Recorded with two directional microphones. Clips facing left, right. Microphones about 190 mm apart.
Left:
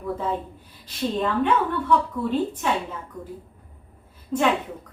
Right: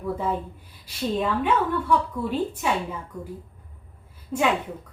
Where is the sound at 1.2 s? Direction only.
10° right (ahead or behind).